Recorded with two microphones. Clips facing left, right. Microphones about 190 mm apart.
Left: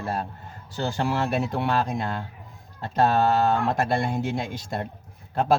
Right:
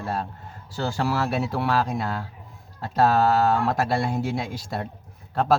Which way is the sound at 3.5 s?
5° right (ahead or behind).